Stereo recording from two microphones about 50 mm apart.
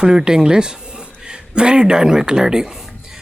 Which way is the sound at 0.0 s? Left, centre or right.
Centre.